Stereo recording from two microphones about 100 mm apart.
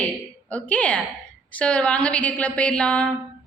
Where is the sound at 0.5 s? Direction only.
15° left (ahead or behind).